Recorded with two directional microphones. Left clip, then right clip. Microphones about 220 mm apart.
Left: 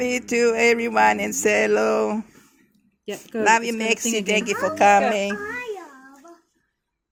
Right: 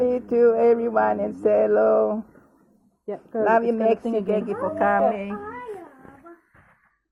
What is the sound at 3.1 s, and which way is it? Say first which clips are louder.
Speech: right 1 dB; 90° left.